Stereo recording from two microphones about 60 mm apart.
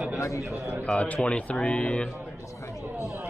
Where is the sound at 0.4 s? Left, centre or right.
Right.